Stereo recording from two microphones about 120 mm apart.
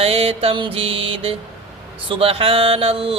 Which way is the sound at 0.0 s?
55° right (ahead or behind).